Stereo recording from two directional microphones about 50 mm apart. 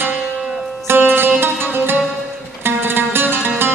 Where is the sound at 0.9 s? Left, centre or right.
Right.